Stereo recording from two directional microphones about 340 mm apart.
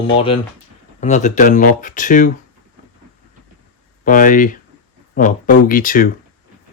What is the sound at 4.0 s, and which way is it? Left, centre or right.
Speech, left.